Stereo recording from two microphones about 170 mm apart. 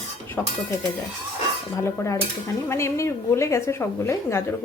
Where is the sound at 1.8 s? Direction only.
15° left (ahead or behind).